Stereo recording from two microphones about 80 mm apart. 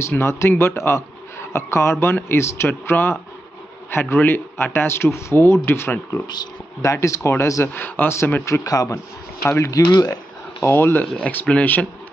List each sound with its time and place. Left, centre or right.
0.0 s a man's voice: left
4.2 s a man's voice: left
7.7 s speech: left
8.5 s speech: left
9.4 s a man's voice: left
9.7 s speech: left
10.6 s speech: left